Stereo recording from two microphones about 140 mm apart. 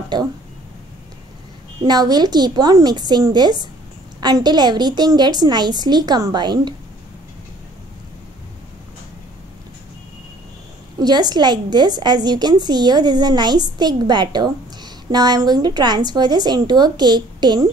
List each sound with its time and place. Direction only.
0.1 s a woman's voice: 30° right (ahead or behind)
1.8 s a woman's voice: 30° right (ahead or behind)
11.0 s a woman's voice: 30° right (ahead or behind)